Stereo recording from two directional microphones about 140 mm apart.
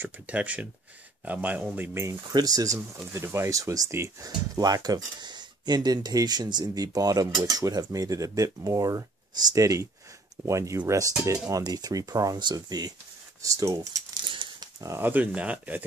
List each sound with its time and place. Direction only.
0.0 s speech: 10° right (ahead or behind)
2.0 s speech: 25° right (ahead or behind)
14.3 s a sound: 35° right (ahead or behind)
14.8 s speech: 20° right (ahead or behind)